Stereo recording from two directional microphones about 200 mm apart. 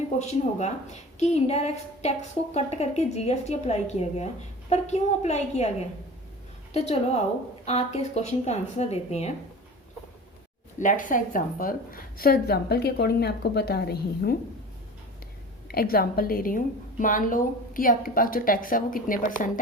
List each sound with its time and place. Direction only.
0.2 s a woman's voice: 35° left (ahead or behind)
6.7 s a woman's voice: 30° left (ahead or behind)
10.8 s a woman's voice: 40° left (ahead or behind)
15.7 s a woman's voice: 50° left (ahead or behind)